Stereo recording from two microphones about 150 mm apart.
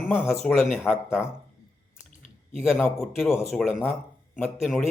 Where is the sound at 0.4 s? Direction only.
Centre (ahead or behind).